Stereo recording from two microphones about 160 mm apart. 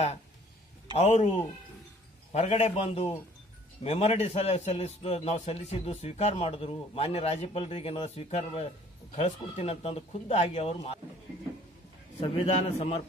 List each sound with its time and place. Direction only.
0.9 s a man's voice: 45° left (ahead or behind)
12.2 s a man's voice: 40° left (ahead or behind)